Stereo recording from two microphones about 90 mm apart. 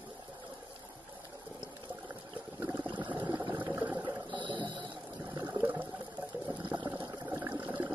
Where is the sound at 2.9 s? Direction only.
65° right (ahead or behind).